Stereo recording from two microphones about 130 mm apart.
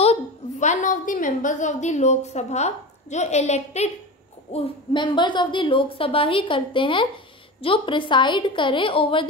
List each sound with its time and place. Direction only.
0.0 s a woman's voice: 60° left (ahead or behind)
4.9 s a woman's voice: 35° left (ahead or behind)